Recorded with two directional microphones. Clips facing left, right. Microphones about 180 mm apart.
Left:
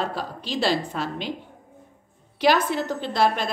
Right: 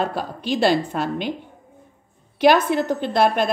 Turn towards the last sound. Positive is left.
turn(degrees=-55)  # may be behind; listen again after turning